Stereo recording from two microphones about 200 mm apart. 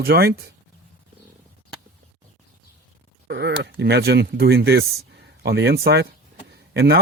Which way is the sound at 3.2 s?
60° right (ahead or behind).